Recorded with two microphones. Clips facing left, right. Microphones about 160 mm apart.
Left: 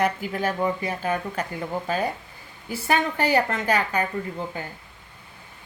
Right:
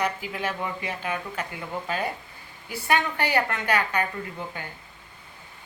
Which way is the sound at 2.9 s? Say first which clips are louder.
Left 3 dB; 30° left (ahead or behind).